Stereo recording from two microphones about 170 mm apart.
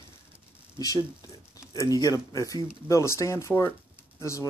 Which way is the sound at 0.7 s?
20° left (ahead or behind).